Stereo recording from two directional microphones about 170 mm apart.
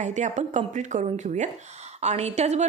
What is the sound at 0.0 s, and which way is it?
A woman's voice, 45° right (ahead or behind).